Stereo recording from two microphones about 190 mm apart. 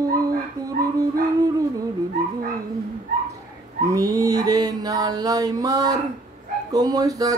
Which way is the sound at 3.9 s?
20° right (ahead or behind).